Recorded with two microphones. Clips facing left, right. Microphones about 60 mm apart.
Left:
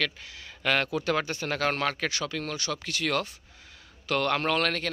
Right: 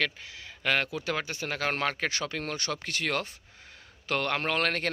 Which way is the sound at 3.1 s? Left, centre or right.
Right.